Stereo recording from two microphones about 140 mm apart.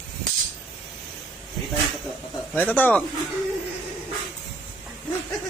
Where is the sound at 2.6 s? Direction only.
10° left (ahead or behind).